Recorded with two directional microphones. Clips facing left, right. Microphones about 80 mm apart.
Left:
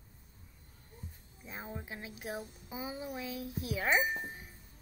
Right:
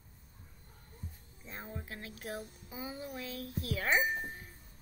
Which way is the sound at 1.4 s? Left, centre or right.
Centre.